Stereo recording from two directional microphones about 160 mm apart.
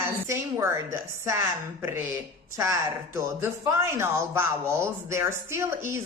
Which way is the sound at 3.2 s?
15° right (ahead or behind).